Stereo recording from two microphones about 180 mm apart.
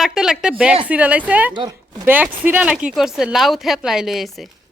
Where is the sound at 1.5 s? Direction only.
20° right (ahead or behind).